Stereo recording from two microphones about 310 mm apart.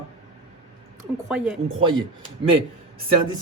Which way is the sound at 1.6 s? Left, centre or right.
Centre.